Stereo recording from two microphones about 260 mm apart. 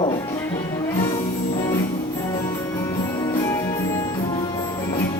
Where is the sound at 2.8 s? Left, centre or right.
Centre.